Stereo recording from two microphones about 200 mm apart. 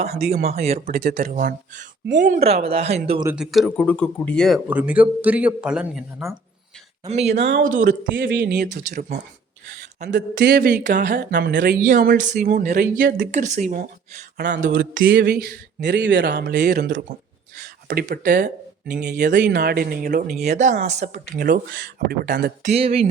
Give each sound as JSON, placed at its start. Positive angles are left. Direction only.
{"t": 0.3, "sound": "speech", "side_deg": -50}
{"t": 3.3, "sound": "speech", "side_deg": 0}
{"t": 7.1, "sound": "speech", "side_deg": -35}
{"t": 7.9, "sound": "speech", "side_deg": -60}
{"t": 11.6, "sound": "speech", "side_deg": -45}
{"t": 13.3, "sound": "speech", "side_deg": -40}
{"t": 14.3, "sound": "speech", "side_deg": -60}
{"t": 15.1, "sound": "speech", "side_deg": -55}
{"t": 20.6, "sound": "speech", "side_deg": -35}
{"t": 21.3, "sound": "speech", "side_deg": -55}
{"t": 22.6, "sound": "speech", "side_deg": -30}